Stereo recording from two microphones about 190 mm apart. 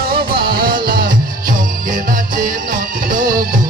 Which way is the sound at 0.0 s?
50° right (ahead or behind).